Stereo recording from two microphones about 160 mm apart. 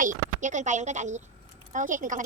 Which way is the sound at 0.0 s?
50° right (ahead or behind).